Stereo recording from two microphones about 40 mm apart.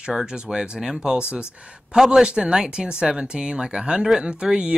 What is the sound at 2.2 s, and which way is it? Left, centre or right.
Speech, right.